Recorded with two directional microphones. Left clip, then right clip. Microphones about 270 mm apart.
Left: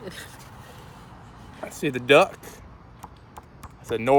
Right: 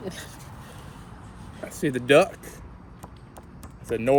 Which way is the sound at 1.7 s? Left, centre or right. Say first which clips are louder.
Left 1 dB; centre.